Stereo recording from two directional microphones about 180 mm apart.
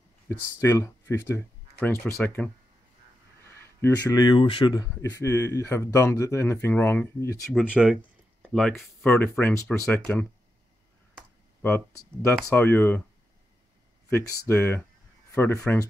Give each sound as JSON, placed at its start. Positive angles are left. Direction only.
{"t": 0.3, "sound": "speech", "side_deg": 15}
{"t": 7.8, "sound": "speech", "side_deg": -5}
{"t": 9.0, "sound": "speech", "side_deg": 10}
{"t": 11.6, "sound": "speech", "side_deg": 10}
{"t": 14.5, "sound": "speech", "side_deg": 10}